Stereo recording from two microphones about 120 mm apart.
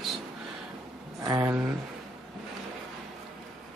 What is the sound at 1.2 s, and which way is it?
Speech, 30° right (ahead or behind).